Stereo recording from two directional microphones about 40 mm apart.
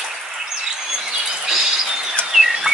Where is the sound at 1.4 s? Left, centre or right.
Centre.